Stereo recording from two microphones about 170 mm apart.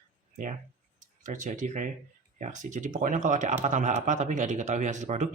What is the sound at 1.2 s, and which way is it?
Speech, 45° right (ahead or behind).